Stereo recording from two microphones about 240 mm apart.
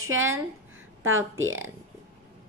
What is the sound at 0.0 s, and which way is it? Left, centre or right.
A woman's voice, right.